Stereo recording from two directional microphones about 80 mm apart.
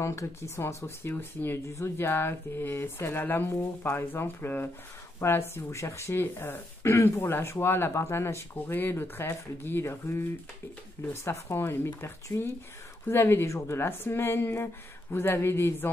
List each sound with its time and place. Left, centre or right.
0.0 s speech: left